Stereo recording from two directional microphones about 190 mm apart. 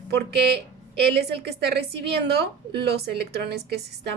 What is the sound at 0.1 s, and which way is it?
A woman's voice, 60° right (ahead or behind).